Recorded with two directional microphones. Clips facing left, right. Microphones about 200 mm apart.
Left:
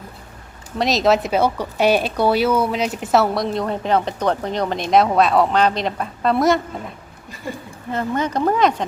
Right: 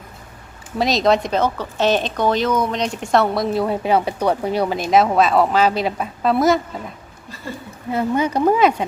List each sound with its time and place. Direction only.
0.8 s speech: centre (ahead or behind)
7.4 s speech: 15° left (ahead or behind)
7.9 s speech: 10° right (ahead or behind)